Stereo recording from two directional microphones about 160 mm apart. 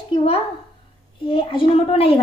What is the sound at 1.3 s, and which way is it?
Speech, 30° left (ahead or behind).